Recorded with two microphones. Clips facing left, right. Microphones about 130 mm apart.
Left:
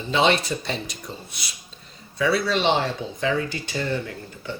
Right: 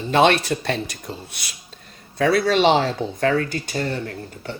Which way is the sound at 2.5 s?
90° right.